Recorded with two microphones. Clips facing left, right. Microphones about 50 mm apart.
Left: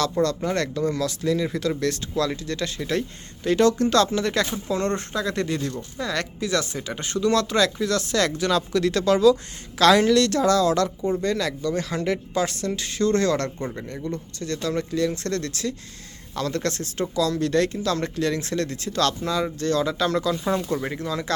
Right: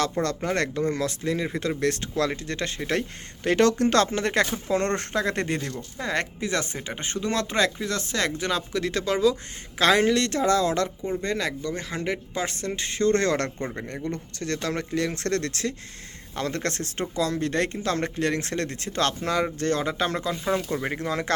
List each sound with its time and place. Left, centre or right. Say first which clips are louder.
0.4 s speech: left 1 dB; right
20.6 s speech: left 3 dB; centre
20.9 s speech: even; right